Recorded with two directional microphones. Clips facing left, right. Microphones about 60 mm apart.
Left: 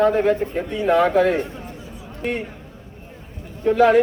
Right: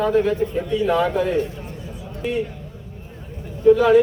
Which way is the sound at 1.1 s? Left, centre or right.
Left.